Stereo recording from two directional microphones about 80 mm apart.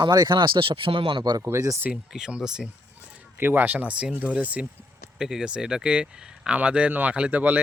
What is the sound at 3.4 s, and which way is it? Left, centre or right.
Speech, right.